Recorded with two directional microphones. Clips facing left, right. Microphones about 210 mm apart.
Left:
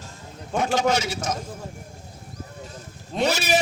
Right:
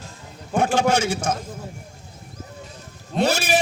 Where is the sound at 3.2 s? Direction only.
50° right (ahead or behind).